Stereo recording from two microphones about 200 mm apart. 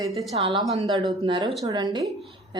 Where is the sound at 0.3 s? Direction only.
30° right (ahead or behind).